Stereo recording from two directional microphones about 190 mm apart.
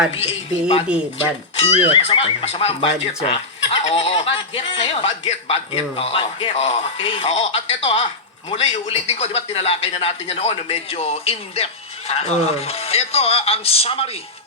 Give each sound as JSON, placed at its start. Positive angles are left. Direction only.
{"t": 1.5, "sound": "speech", "side_deg": 30}